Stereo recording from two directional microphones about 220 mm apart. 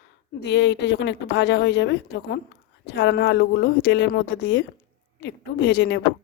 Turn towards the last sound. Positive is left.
turn(degrees=50)  # may be behind; listen again after turning